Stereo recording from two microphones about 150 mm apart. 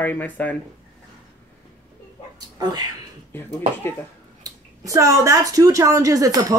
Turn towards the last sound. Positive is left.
turn(degrees=-25)  # may be behind; listen again after turning